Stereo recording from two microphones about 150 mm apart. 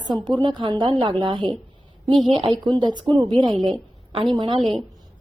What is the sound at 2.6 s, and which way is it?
A woman's voice, 30° right (ahead or behind).